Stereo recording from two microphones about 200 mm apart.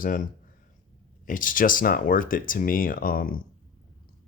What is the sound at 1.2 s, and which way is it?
Speech, 40° left (ahead or behind).